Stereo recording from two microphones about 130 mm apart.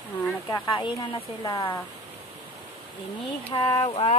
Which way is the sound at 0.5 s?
35° left (ahead or behind).